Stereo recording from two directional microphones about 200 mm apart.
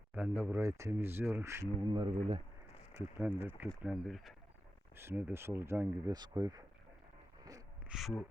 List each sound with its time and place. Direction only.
0.1 s speech: 5° right (ahead or behind)
2.9 s speech: 10° right (ahead or behind)
7.9 s speech: centre (ahead or behind)